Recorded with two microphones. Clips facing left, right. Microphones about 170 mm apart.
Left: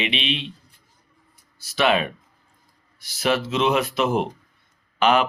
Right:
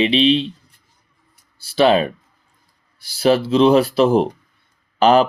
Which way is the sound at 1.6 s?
30° right (ahead or behind).